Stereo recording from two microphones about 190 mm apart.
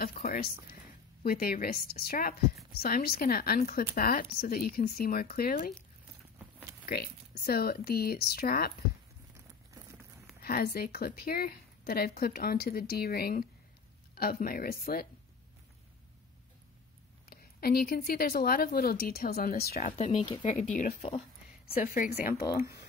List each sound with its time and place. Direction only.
0.0 s speech: 45° left (ahead or behind)
6.9 s speech: 55° left (ahead or behind)
10.4 s speech: 50° left (ahead or behind)
17.3 s speech: 55° left (ahead or behind)